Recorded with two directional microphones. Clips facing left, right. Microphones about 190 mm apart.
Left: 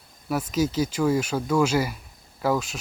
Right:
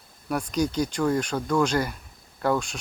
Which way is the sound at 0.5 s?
5° left (ahead or behind).